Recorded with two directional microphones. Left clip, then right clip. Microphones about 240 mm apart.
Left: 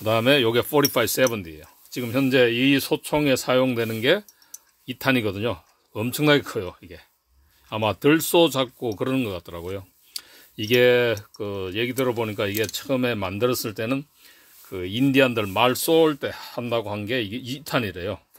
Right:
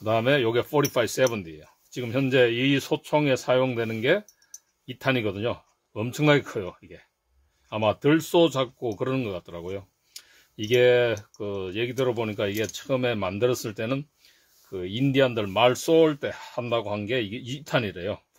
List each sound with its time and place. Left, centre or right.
0.0 s speech: left